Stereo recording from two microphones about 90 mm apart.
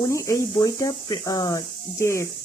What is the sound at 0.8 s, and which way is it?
Speech, 45° left (ahead or behind).